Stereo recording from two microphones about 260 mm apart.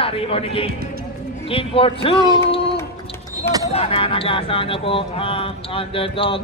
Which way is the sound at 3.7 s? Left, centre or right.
Left.